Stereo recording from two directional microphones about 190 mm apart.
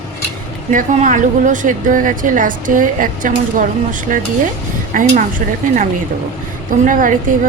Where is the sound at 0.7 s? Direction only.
40° right (ahead or behind).